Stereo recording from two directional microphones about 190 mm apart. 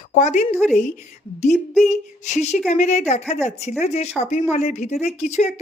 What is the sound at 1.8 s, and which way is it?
Speech, 40° left (ahead or behind).